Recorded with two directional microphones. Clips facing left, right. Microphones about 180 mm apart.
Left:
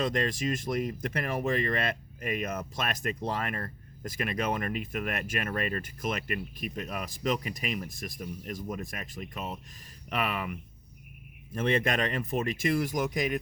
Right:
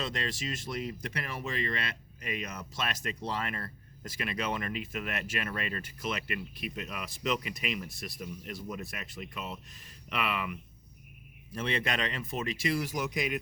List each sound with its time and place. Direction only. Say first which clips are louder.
0.0 s speech: left 7 dB; 50° left (ahead or behind)